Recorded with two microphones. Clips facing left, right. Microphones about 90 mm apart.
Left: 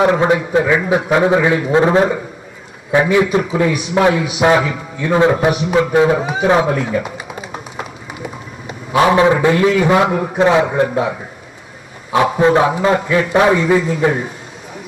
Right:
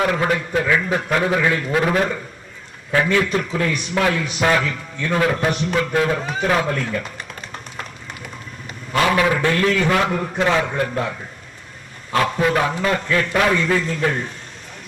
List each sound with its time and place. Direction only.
0.0 s a man's voice: 25° left (ahead or behind)
5.5 s a man's voice: 10° left (ahead or behind)
6.5 s run: 15° left (ahead or behind)
9.0 s a man's voice: 25° left (ahead or behind)
13.0 s a man's voice: 10° left (ahead or behind)